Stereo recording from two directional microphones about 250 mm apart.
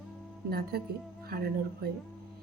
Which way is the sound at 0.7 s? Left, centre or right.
Right.